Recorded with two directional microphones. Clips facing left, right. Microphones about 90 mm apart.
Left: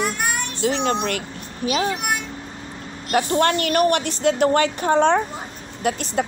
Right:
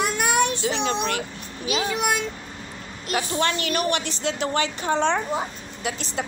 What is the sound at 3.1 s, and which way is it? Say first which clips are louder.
Speech: left 6 dB; 55° left (ahead or behind).